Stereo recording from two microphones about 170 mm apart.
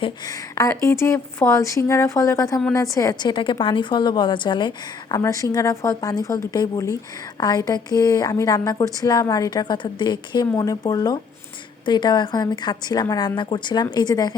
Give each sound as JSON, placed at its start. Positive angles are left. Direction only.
{"t": 0.0, "sound": "a woman's voice", "side_deg": 20}